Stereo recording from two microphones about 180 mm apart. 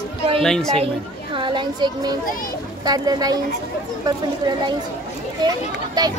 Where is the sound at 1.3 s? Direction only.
25° right (ahead or behind).